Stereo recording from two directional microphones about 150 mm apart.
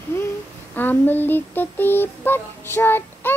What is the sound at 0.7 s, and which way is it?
Child singing, 10° left (ahead or behind).